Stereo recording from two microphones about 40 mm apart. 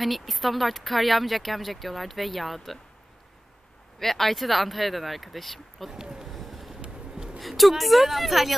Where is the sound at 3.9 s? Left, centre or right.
Centre.